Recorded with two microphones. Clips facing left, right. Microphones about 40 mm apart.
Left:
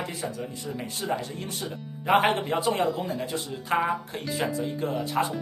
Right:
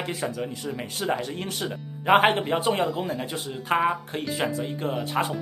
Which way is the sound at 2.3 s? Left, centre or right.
Right.